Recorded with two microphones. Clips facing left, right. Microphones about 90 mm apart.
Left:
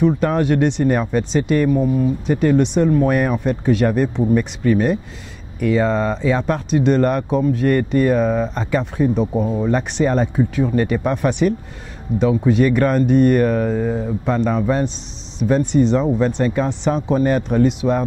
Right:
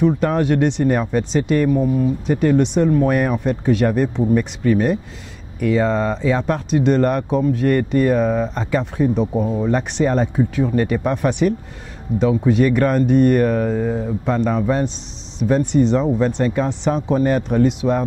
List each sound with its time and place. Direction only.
0.0 s speech: 15° left (ahead or behind)